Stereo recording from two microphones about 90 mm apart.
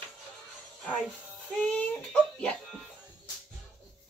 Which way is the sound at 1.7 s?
15° left (ahead or behind).